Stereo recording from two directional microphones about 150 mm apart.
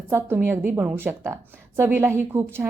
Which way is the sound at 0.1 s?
15° right (ahead or behind).